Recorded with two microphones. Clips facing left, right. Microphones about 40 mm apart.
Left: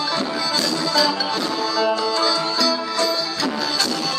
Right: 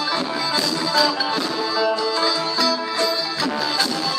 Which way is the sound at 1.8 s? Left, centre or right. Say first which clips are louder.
Even; centre.